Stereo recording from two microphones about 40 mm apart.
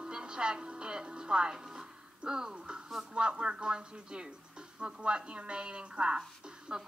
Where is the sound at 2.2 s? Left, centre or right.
Centre.